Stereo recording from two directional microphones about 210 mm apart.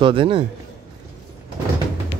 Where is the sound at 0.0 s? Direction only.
25° right (ahead or behind).